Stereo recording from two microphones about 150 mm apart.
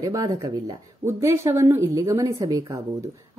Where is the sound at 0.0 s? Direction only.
20° right (ahead or behind).